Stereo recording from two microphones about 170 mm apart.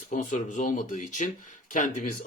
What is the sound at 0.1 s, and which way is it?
Speech, 50° left (ahead or behind).